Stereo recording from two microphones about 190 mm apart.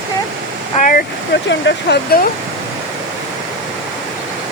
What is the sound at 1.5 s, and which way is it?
Speech, 65° left (ahead or behind).